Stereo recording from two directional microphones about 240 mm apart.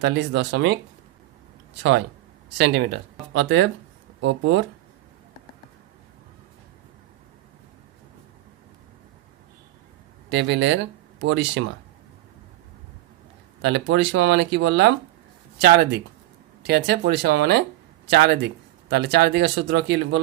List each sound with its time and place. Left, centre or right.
0.0 s speech: right
1.8 s speech: right
10.2 s speech: right
13.6 s speech: right